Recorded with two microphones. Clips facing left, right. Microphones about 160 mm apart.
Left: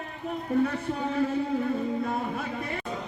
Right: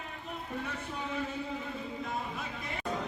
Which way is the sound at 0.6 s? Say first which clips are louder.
Left 10 dB; 60° left (ahead or behind).